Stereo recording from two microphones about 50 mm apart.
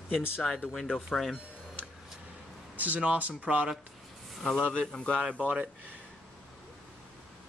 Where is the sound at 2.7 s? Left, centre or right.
Right.